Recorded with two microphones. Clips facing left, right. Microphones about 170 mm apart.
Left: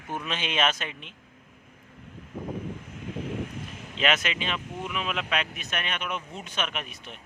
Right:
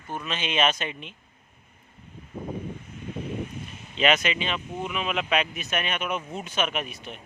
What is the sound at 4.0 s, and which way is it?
Speech, centre (ahead or behind).